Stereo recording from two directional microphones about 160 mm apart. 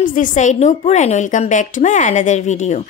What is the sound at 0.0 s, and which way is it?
A woman's voice, 55° left (ahead or behind).